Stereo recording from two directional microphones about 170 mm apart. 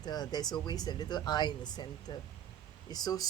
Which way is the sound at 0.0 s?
25° left (ahead or behind).